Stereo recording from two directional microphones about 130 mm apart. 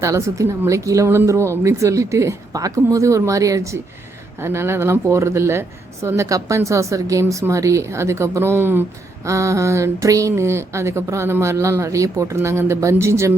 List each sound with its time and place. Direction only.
0.0 s speech: 25° right (ahead or behind)